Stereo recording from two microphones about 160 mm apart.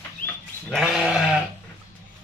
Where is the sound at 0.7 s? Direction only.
5° right (ahead or behind).